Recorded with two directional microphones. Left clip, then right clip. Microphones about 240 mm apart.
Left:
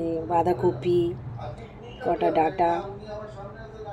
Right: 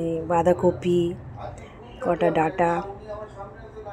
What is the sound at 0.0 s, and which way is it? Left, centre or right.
Speech, centre.